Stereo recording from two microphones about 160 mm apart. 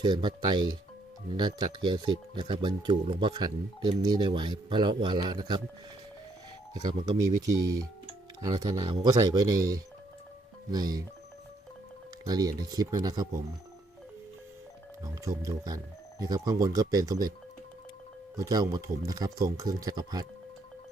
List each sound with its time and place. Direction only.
0.0 s speech: 30° right (ahead or behind)
6.8 s speech: 25° right (ahead or behind)
12.2 s speech: 25° right (ahead or behind)
15.0 s speech: 20° right (ahead or behind)
18.3 s speech: 25° right (ahead or behind)